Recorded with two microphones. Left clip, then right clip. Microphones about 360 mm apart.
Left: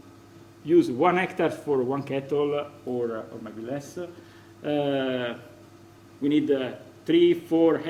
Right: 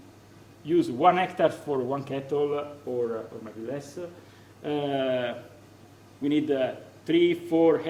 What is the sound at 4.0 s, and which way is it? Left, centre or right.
Speech, left.